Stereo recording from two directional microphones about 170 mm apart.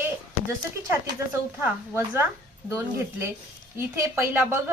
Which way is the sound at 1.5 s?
15° right (ahead or behind).